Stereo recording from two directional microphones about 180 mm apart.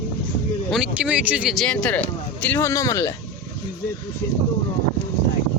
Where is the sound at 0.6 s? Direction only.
5° right (ahead or behind); by 3.1 s 15° left (ahead or behind).